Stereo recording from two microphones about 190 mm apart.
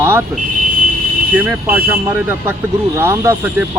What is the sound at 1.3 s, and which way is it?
Speech, 10° right (ahead or behind).